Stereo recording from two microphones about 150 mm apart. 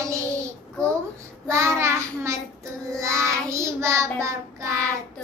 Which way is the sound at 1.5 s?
20° right (ahead or behind).